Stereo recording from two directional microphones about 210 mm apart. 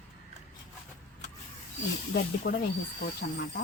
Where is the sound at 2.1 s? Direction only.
50° left (ahead or behind).